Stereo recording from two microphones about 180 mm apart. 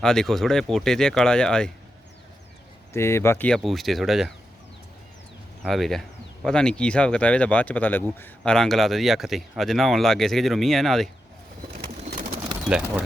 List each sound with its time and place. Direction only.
0.0 s speech: 5° left (ahead or behind)
2.9 s speech: 15° left (ahead or behind)
5.6 s speech: centre (ahead or behind)
12.6 s speech: 5° right (ahead or behind)